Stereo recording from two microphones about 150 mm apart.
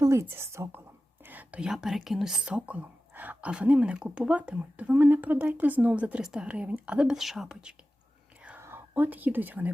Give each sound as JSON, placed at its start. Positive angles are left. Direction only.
{"t": 0.0, "sound": "speech", "side_deg": -20}
{"t": 8.4, "sound": "whispering", "side_deg": -15}